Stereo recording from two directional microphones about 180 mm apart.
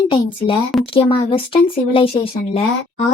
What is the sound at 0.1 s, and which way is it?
Speech, 30° left (ahead or behind).